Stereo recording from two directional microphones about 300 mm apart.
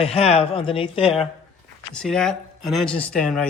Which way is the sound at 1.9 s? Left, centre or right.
Centre.